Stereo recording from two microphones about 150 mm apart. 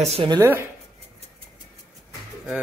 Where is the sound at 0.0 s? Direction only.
40° right (ahead or behind).